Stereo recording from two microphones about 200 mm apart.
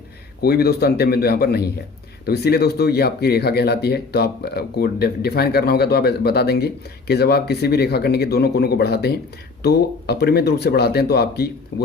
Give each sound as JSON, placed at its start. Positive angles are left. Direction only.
{"t": 0.4, "sound": "speech", "side_deg": 50}